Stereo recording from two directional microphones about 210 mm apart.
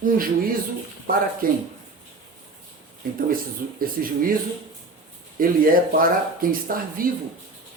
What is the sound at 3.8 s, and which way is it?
Speech, 45° right (ahead or behind).